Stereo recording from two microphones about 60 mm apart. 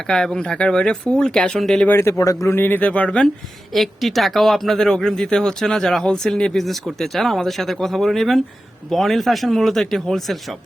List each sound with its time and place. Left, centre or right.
0.3 s speech: centre
2.1 s speech: left
2.5 s speech: left
3.7 s speech: centre